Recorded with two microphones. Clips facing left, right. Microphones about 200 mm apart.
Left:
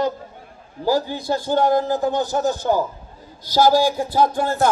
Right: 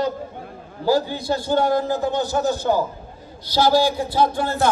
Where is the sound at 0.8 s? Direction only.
10° left (ahead or behind).